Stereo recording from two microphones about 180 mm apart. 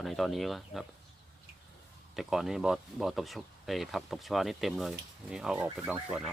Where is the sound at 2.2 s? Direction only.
Centre (ahead or behind).